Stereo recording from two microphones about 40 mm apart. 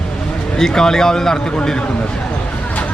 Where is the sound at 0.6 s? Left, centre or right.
Centre.